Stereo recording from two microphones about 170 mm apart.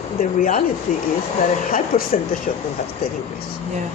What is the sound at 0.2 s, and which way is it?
Speech, 50° left (ahead or behind).